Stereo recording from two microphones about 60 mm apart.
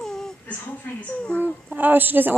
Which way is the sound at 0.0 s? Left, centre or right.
Centre.